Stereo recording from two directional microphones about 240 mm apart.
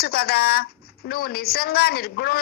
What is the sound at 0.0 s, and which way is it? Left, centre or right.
A woman's voice, left.